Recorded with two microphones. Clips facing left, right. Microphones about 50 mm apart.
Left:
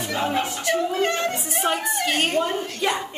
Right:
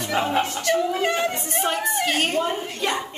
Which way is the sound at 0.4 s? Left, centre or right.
Centre.